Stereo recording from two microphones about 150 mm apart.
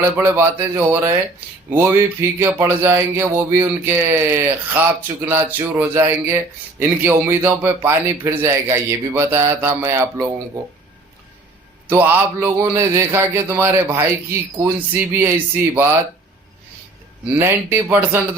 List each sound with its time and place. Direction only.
0.0 s speech: 15° right (ahead or behind)
11.9 s speech: 10° right (ahead or behind)
17.4 s speech: 15° right (ahead or behind)